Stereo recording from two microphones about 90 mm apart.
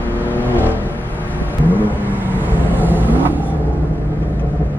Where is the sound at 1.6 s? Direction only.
20° right (ahead or behind).